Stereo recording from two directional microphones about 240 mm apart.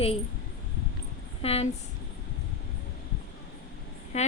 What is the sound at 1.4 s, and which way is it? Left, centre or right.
Speech, left.